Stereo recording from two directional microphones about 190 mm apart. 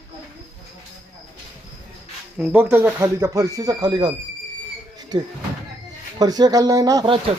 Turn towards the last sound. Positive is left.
turn(degrees=-25)  # may be behind; listen again after turning